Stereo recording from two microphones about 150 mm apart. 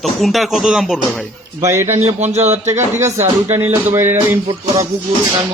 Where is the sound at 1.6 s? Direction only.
20° right (ahead or behind).